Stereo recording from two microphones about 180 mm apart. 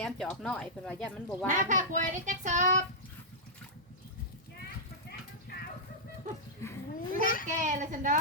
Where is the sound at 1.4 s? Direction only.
45° right (ahead or behind).